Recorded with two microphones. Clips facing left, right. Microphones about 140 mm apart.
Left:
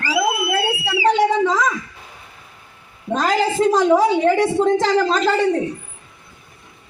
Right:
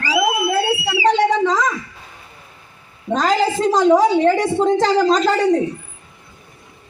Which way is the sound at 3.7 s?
5° left (ahead or behind).